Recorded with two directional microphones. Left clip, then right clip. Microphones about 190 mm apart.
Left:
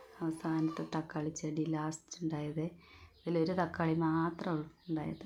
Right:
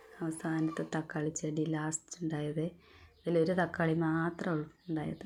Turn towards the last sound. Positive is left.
turn(degrees=-15)  # may be behind; listen again after turning